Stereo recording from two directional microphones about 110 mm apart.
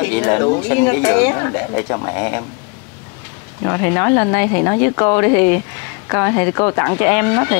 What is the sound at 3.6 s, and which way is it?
Speech, 25° left (ahead or behind).